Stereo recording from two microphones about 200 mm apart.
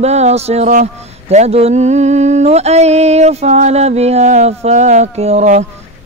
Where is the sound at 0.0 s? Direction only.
35° right (ahead or behind).